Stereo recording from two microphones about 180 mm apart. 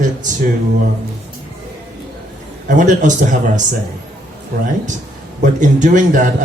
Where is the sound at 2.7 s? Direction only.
45° right (ahead or behind).